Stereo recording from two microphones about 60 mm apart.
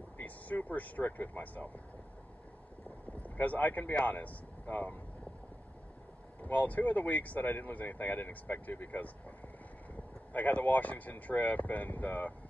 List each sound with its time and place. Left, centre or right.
0.2 s speech: left
3.2 s speech: left
6.4 s speech: left
10.3 s speech: left